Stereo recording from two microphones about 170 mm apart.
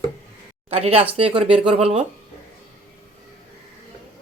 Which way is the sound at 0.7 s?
35° right (ahead or behind).